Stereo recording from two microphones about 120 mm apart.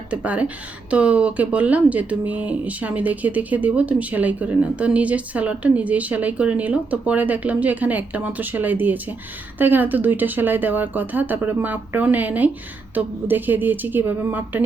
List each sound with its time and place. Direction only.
0.1 s speech: 10° right (ahead or behind)